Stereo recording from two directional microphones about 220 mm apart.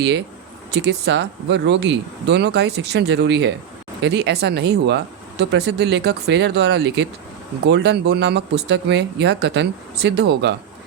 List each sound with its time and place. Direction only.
0.7 s speech: 50° right (ahead or behind)